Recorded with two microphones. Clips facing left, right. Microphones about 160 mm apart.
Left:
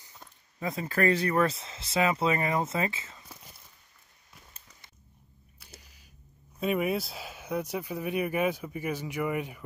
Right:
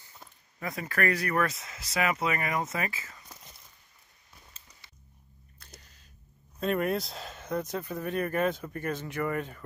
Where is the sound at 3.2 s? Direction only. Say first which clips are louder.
Left 1 dB; 10° left (ahead or behind).